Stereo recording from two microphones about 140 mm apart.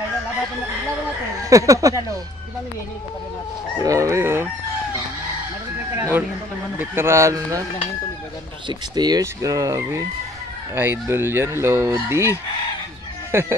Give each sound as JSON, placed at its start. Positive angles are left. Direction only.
{"t": 1.5, "sound": "speech", "side_deg": -25}
{"t": 3.8, "sound": "speech", "side_deg": -25}
{"t": 5.9, "sound": "speech", "side_deg": -20}
{"t": 8.6, "sound": "speech", "side_deg": -30}